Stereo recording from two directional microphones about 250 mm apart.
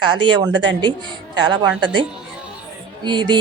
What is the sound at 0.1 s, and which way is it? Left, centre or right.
Speech, centre.